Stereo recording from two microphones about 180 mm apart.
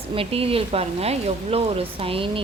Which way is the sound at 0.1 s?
30° right (ahead or behind).